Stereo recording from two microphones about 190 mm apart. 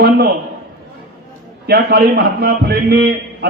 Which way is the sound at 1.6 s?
55° right (ahead or behind).